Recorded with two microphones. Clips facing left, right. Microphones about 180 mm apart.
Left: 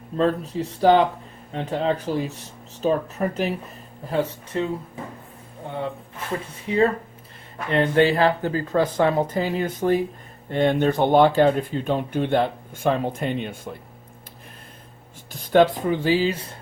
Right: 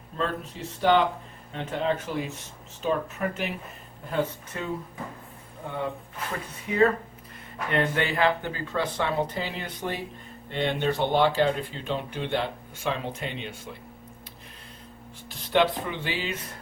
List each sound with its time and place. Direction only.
0.2 s speech: 40° left (ahead or behind)
4.5 s speech: 25° left (ahead or behind)
6.7 s speech: 25° left (ahead or behind); by 13.7 s 50° left (ahead or behind)
15.3 s speech: 45° left (ahead or behind)